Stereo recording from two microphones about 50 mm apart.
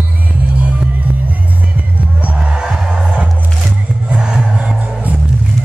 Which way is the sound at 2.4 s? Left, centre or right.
Centre.